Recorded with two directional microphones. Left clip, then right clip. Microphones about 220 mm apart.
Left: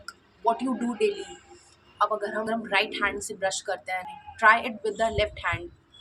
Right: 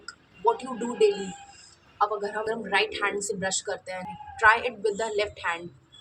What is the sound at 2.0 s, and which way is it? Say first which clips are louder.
A woman's voice: left 1 dB; 15° left (ahead or behind).